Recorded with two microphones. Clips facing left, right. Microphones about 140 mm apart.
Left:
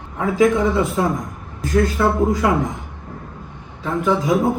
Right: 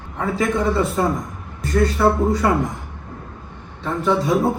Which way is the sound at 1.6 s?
Centre (ahead or behind).